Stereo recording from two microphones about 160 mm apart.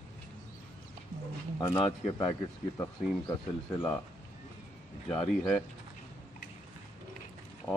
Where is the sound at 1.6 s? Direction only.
25° left (ahead or behind).